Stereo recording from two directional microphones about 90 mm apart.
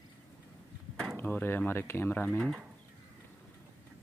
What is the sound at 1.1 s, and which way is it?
Speech, 15° left (ahead or behind).